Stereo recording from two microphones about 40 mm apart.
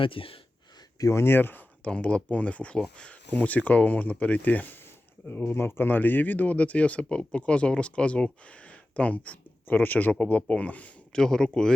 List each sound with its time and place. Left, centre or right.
1.2 s speech: left
1.8 s speech: left
5.5 s speech: left
6.0 s speech: left
9.6 s speech: left
10.1 s speech: left
11.1 s speech: centre